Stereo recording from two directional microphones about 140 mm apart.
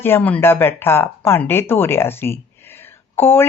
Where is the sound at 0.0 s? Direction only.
15° left (ahead or behind).